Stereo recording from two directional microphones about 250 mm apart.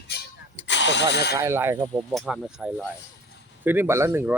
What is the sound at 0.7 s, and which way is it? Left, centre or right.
Engine starting, left.